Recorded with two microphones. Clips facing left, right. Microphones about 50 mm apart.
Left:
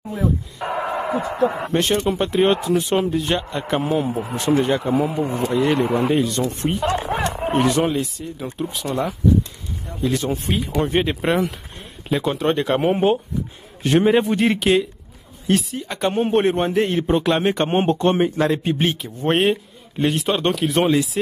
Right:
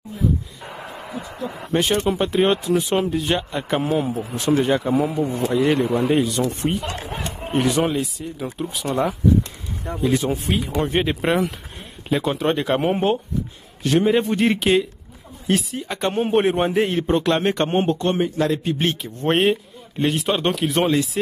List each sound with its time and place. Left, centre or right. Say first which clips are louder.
0.1 s a sound: left 1 dB; left
1.7 s speech: even; centre
4.1 s speech: left 2 dB; left
4.6 s speech: even; centre
7.2 s a sound: left 7 dB; left
7.5 s speech: even; centre
13.8 s speech: left 2 dB; left
14.2 s speech: left 1 dB; centre
17.6 s speech: left 2 dB; left
18.8 s speech: left 1 dB; centre